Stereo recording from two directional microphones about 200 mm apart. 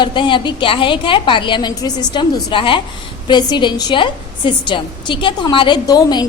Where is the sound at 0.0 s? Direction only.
25° left (ahead or behind).